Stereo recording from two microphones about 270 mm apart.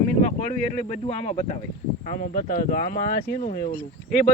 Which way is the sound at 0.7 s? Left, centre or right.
Left.